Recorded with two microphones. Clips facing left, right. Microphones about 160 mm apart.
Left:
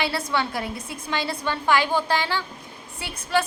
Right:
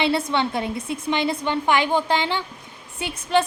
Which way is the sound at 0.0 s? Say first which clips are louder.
Right 4 dB; 25° right (ahead or behind).